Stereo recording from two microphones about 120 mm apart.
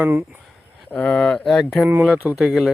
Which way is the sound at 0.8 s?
10° left (ahead or behind).